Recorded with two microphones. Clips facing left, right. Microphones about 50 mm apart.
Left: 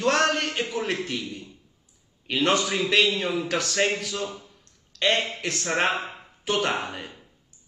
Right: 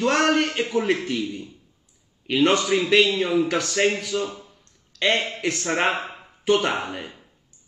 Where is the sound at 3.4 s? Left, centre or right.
Centre.